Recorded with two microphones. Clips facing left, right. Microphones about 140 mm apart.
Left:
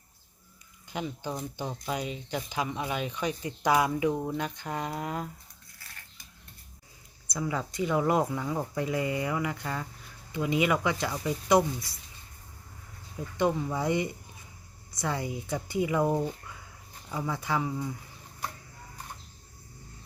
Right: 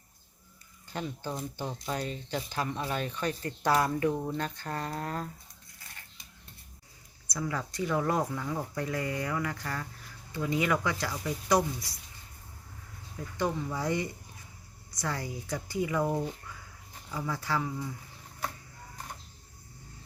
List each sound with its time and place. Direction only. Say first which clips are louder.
0.9 s speech: left 2 dB; 10° left (ahead or behind)
7.3 s speech: left 2 dB; 20° left (ahead or behind)
13.1 s speech: left 4 dB; 20° left (ahead or behind)